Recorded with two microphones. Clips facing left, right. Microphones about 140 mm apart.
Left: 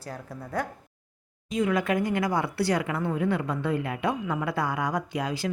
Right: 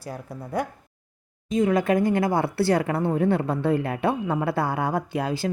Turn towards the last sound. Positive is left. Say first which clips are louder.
# right 3 dB
turn(degrees=-30)  # may be behind; listen again after turning